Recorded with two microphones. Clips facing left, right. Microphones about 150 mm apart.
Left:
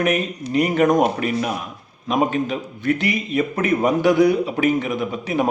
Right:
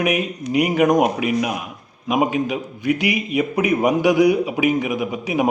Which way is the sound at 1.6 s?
10° right (ahead or behind).